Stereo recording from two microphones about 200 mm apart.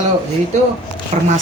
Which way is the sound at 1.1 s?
35° right (ahead or behind).